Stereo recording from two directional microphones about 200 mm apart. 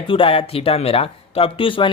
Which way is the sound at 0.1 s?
25° left (ahead or behind).